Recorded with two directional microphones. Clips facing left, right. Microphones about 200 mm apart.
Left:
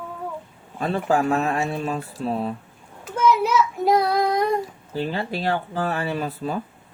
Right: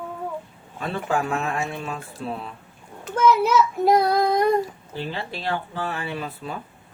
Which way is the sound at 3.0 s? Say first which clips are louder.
Right 1 dB; 10° left (ahead or behind).